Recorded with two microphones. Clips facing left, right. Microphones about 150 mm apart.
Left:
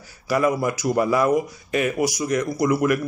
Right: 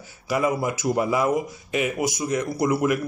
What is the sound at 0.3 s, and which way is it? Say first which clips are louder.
Speech: left 2 dB; 20° right (ahead or behind).